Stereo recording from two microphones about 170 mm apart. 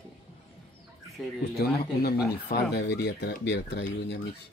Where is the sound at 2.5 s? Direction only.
75° left (ahead or behind).